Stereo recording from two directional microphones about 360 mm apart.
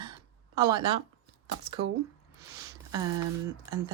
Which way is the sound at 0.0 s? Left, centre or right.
Centre.